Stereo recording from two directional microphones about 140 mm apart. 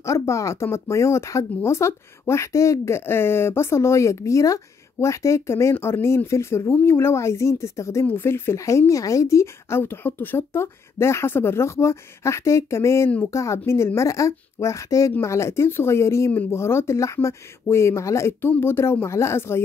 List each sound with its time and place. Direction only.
0.0 s speech: 20° left (ahead or behind)